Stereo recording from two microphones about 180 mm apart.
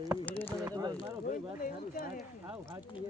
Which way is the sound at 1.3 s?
50° left (ahead or behind).